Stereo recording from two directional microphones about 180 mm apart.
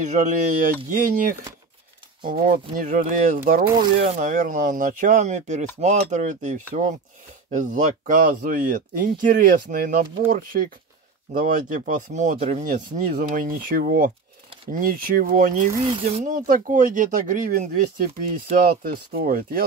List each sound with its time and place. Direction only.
0.0 s speech: 45° right (ahead or behind)
2.7 s speech: 50° right (ahead or behind)
15.8 s speech: 30° right (ahead or behind); by 19.6 s 55° right (ahead or behind)